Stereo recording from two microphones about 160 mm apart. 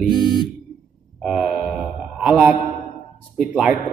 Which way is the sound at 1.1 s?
5° right (ahead or behind).